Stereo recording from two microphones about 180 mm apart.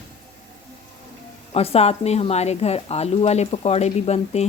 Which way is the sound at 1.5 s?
35° left (ahead or behind).